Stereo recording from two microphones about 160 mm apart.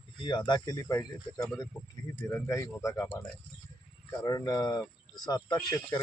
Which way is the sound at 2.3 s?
20° left (ahead or behind).